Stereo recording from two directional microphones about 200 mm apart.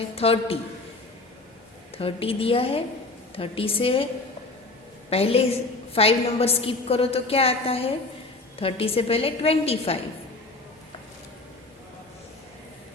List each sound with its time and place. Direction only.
0.2 s a woman's voice: 30° left (ahead or behind)
2.0 s a woman's voice: 30° left (ahead or behind)